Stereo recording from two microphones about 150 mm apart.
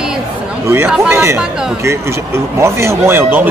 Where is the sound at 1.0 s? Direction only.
15° right (ahead or behind).